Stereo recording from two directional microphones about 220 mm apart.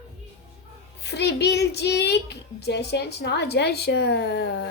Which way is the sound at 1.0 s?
50° left (ahead or behind).